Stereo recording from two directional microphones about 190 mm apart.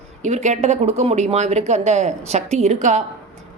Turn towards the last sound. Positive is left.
turn(degrees=-40)  # may be behind; listen again after turning